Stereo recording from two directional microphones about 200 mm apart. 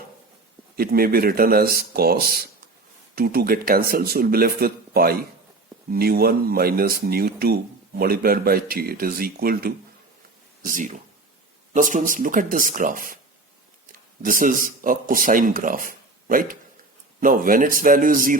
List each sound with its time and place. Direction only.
0.8 s speech: 50° right (ahead or behind)
14.2 s speech: 45° right (ahead or behind)